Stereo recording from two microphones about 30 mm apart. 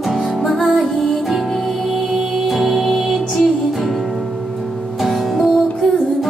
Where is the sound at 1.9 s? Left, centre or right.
Centre.